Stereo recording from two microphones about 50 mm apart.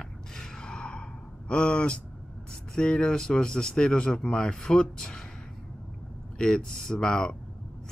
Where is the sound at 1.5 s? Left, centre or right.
Left.